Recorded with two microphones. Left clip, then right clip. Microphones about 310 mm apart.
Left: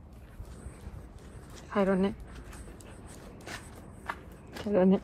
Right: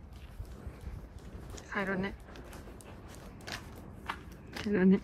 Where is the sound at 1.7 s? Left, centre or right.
Left.